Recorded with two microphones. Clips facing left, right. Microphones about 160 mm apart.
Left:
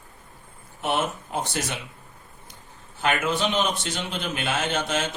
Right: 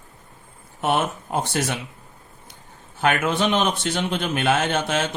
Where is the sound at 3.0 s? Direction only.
55° right (ahead or behind).